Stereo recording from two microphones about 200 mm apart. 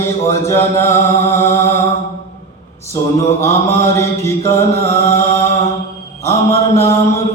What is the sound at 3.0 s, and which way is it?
Mantra, 15° left (ahead or behind).